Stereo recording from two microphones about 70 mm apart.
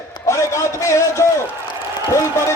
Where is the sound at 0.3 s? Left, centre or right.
Left.